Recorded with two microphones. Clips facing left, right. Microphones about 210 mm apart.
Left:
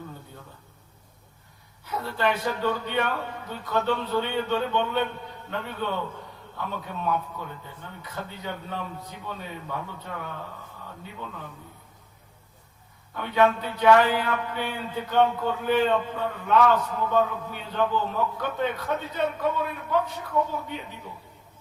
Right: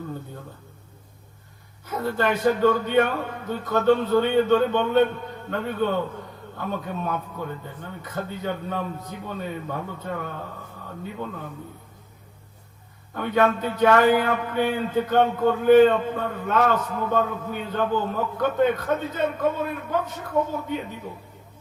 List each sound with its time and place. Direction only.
1.8 s a man's voice: 45° right (ahead or behind)
13.1 s a man's voice: 45° right (ahead or behind)